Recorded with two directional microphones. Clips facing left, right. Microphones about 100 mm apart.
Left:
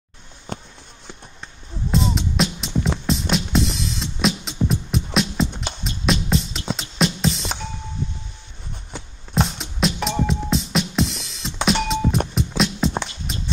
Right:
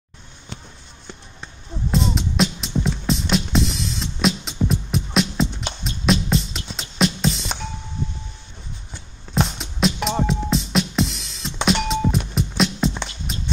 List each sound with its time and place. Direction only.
0.5 s a sound: 45° left (ahead or behind)
1.9 s music: centre (ahead or behind)
9.3 s music: centre (ahead or behind)
13.3 s walk: centre (ahead or behind)